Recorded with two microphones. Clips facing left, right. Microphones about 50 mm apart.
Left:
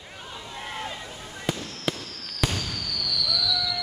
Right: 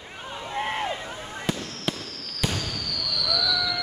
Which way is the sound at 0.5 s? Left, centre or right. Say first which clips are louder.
Right 7 dB; right.